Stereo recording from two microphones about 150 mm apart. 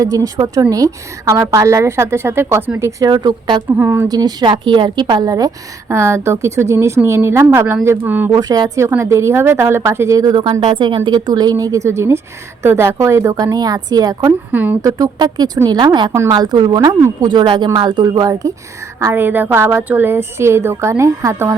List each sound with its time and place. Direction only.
0.0 s a woman's voice: 25° right (ahead or behind)
3.1 s a woman's voice: 30° right (ahead or behind)
3.7 s a woman's voice: 15° right (ahead or behind)
4.1 s a woman's voice: 25° right (ahead or behind)
8.3 s a woman's voice: 25° right (ahead or behind)
14.5 s a woman's voice: 10° right (ahead or behind)
14.8 s a woman's voice: 25° right (ahead or behind)